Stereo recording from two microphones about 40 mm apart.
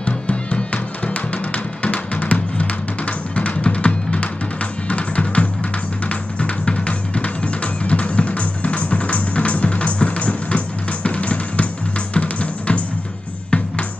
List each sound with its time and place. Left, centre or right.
0.0 s music: left
6.6 s music: left